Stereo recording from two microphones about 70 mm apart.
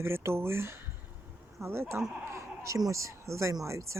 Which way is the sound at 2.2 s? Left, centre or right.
Right.